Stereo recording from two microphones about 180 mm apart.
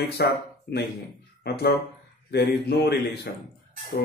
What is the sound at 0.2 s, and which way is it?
Speech, 65° left (ahead or behind).